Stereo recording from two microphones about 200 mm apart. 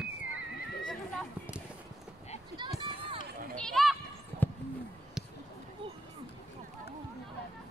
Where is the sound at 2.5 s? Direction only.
25° right (ahead or behind).